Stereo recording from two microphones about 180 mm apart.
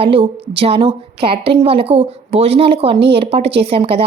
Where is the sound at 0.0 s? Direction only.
30° right (ahead or behind).